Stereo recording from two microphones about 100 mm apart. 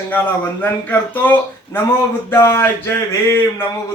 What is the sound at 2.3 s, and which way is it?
A man's voice, 25° left (ahead or behind).